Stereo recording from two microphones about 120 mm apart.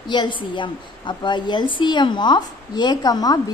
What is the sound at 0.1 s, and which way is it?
A woman's voice, 40° left (ahead or behind).